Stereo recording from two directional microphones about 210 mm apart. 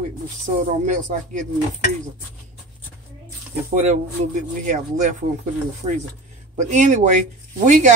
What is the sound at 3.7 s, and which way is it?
Speech, 35° right (ahead or behind).